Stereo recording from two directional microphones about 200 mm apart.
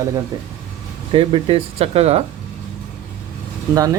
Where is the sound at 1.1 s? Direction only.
25° right (ahead or behind).